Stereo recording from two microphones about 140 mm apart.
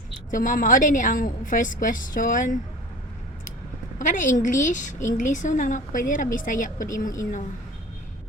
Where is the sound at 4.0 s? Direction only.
70° left (ahead or behind).